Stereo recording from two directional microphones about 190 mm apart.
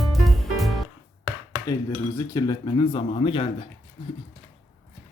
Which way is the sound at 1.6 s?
20° left (ahead or behind).